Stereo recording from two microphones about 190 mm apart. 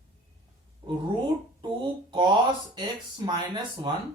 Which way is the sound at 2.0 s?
25° right (ahead or behind).